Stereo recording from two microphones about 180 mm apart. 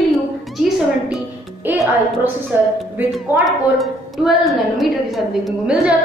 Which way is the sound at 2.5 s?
10° right (ahead or behind).